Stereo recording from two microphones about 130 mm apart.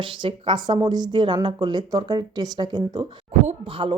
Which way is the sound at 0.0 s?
40° right (ahead or behind).